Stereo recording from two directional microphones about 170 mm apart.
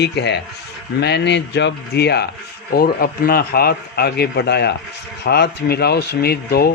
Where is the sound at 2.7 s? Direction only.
60° left (ahead or behind).